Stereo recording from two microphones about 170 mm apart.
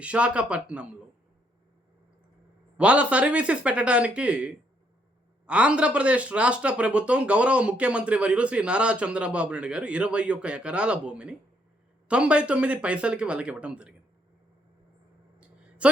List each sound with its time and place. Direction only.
0.0 s speech: 5° right (ahead or behind)
2.7 s speech: 5° right (ahead or behind)